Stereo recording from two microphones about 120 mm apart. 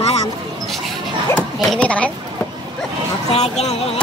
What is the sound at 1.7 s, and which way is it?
Speech, 10° left (ahead or behind).